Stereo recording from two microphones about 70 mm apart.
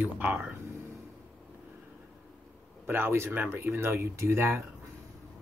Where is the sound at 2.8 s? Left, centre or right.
Right.